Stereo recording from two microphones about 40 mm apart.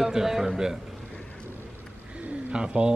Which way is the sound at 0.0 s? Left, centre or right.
Centre.